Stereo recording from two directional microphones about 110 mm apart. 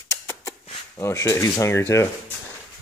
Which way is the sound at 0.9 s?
25° left (ahead or behind).